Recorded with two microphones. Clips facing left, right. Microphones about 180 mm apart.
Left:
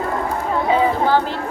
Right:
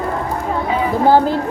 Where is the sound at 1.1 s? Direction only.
40° right (ahead or behind).